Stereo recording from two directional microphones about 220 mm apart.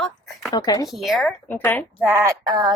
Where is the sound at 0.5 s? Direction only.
15° left (ahead or behind).